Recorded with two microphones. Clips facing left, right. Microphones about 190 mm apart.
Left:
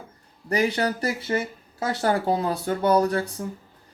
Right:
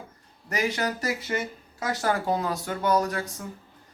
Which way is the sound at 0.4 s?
30° left (ahead or behind).